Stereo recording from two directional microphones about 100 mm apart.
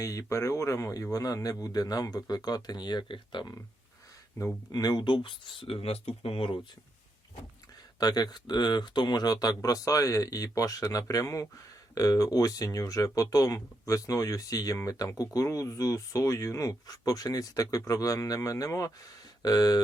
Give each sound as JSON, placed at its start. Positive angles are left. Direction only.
{"t": 0.0, "sound": "speech", "side_deg": 35}
{"t": 4.7, "sound": "speech", "side_deg": 40}
{"t": 7.9, "sound": "speech", "side_deg": 40}